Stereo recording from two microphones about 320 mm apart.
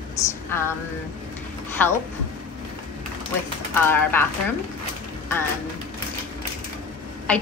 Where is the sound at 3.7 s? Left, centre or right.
Centre.